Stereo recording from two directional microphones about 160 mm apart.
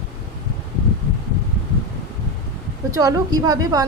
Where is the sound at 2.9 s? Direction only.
25° right (ahead or behind).